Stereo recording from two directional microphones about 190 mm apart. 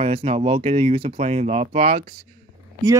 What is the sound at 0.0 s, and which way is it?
Speech, 30° right (ahead or behind).